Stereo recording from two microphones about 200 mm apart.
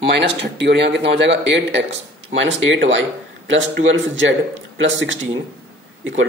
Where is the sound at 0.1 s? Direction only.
60° right (ahead or behind).